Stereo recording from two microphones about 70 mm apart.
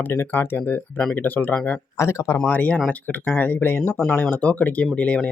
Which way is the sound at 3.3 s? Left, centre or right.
Left.